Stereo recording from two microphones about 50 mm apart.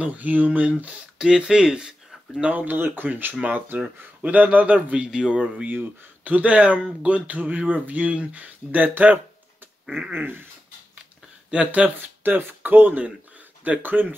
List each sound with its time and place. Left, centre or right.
0.0 s a man's voice: right
1.1 s speech: centre
2.4 s a man's voice: right; by 5.4 s centre
6.2 s a man's voice: right
10.1 s dog: right
11.5 s a man's voice: right
12.0 s speech: right